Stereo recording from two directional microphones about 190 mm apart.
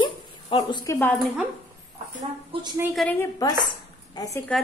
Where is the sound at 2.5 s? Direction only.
30° right (ahead or behind).